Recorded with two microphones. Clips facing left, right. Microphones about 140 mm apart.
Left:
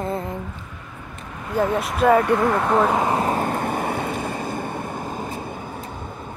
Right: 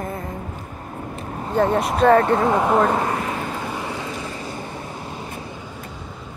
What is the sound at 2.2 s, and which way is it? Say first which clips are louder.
Speech: right 1 dB; 25° right (ahead or behind).